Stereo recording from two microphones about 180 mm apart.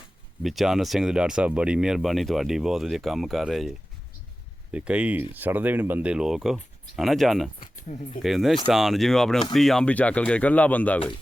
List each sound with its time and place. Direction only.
0.4 s speech: centre (ahead or behind)
7.8 s speech: 40° left (ahead or behind)
8.2 s speech: centre (ahead or behind)